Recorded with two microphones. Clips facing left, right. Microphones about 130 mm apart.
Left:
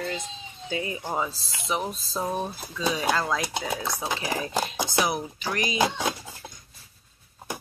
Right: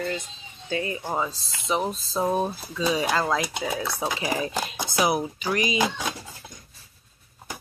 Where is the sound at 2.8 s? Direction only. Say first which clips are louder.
Right 2 dB; 5° right (ahead or behind).